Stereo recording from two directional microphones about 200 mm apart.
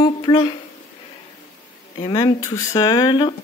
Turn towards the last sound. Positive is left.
turn(degrees=20)  # may be behind; listen again after turning